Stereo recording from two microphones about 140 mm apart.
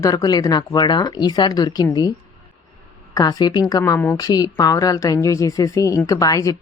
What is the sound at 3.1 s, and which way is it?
Speech, 30° left (ahead or behind).